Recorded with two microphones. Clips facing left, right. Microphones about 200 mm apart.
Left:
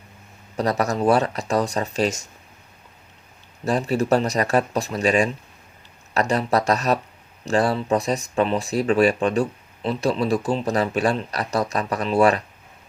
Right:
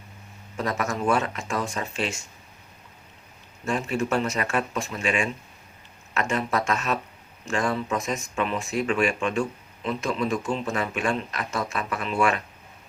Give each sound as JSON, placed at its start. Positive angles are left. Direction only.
{"t": 0.5, "sound": "speech", "side_deg": 35}
{"t": 3.6, "sound": "speech", "side_deg": 35}